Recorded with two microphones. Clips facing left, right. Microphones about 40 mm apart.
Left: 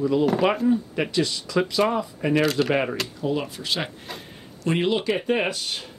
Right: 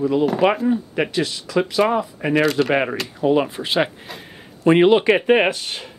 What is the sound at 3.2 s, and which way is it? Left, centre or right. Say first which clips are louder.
Speech: right 11 dB; right.